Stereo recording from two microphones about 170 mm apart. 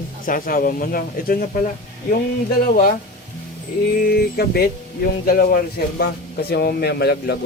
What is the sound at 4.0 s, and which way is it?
A man's voice, 65° left (ahead or behind).